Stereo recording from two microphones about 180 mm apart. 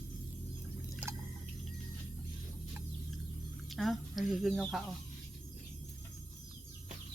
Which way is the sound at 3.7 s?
Centre (ahead or behind).